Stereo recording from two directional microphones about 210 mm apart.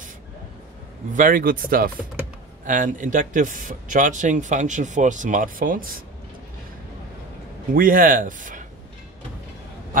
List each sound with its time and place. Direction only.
1.1 s speech: 40° right (ahead or behind)
7.7 s speech: 40° right (ahead or behind)